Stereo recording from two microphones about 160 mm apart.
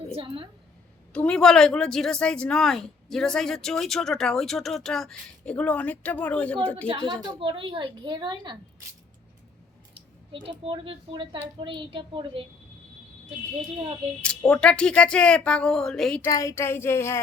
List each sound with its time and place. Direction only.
0.1 s a woman's voice: 35° right (ahead or behind)
1.1 s speech: 5° left (ahead or behind)
7.2 s a woman's voice: 30° right (ahead or behind)
9.9 s a woman's voice: 30° right (ahead or behind)
14.2 s speech: 5° left (ahead or behind)
16.2 s speech: 20° left (ahead or behind)